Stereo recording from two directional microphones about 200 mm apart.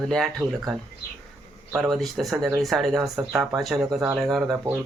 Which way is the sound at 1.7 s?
Centre (ahead or behind).